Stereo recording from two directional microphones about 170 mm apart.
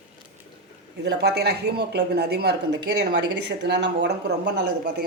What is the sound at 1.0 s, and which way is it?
A woman's voice, 75° right (ahead or behind).